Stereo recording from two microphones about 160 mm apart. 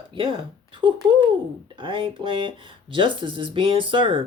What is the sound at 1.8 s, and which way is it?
Speech, 30° right (ahead or behind).